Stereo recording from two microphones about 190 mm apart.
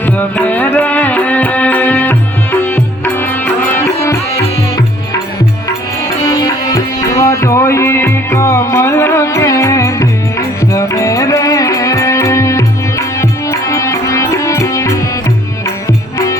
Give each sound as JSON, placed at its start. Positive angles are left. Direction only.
{"t": 0.0, "sound": "music", "side_deg": 10}
{"t": 6.2, "sound": "music", "side_deg": 20}
{"t": 16.1, "sound": "music", "side_deg": 15}